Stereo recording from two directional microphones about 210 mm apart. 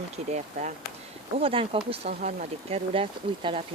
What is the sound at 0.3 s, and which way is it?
Speech, 30° right (ahead or behind).